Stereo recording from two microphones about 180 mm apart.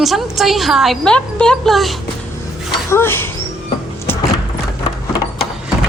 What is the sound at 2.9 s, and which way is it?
Speech, 15° left (ahead or behind).